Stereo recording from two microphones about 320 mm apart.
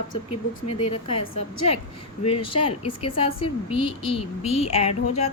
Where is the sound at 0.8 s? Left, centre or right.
Centre.